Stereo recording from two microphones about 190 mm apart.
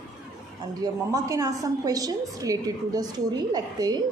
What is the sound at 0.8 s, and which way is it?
A woman's voice, 20° right (ahead or behind).